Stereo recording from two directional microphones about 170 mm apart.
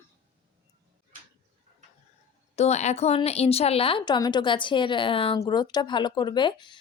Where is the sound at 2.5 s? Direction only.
40° left (ahead or behind).